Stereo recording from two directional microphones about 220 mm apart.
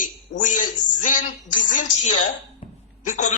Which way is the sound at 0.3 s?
35° left (ahead or behind).